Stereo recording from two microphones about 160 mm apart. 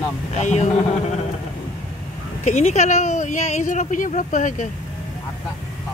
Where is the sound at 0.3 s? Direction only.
45° left (ahead or behind).